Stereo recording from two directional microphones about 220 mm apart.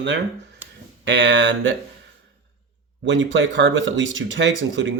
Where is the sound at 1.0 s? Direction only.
50° right (ahead or behind).